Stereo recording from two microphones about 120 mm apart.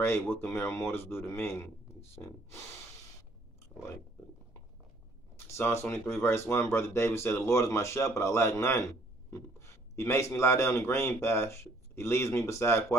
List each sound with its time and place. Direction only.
0.0 s a man's voice: 20° left (ahead or behind)
5.5 s a man's voice: 20° left (ahead or behind)